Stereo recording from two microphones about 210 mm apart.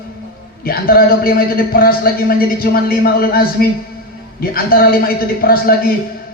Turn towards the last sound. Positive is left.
turn(degrees=45)  # may be behind; listen again after turning